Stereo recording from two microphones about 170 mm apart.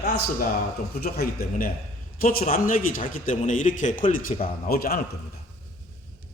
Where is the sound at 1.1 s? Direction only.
60° left (ahead or behind).